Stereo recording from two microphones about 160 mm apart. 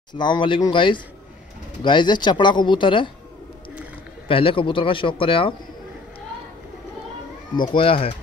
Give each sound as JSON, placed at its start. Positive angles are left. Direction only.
{"t": 0.1, "sound": "speech", "side_deg": 30}
{"t": 4.3, "sound": "speech", "side_deg": 35}
{"t": 7.7, "sound": "speech", "side_deg": 35}